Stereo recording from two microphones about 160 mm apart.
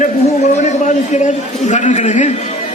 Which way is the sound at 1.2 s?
50° left (ahead or behind).